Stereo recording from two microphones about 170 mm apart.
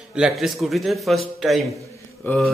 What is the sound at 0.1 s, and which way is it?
A man's voice, 5° right (ahead or behind).